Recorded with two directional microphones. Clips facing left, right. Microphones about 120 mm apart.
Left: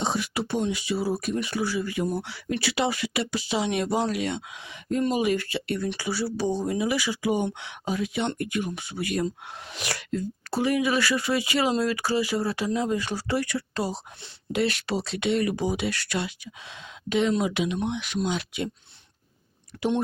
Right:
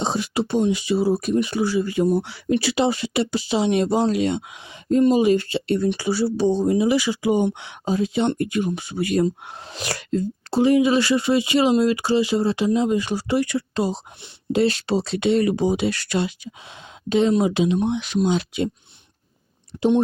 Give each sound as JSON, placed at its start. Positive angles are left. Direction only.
{"t": 0.0, "sound": "speech", "side_deg": -30}
{"t": 19.7, "sound": "speech", "side_deg": -20}